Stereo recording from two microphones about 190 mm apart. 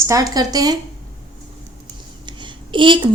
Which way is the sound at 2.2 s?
25° right (ahead or behind).